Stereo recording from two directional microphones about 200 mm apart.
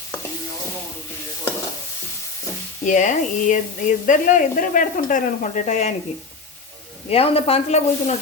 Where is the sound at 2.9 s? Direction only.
40° left (ahead or behind).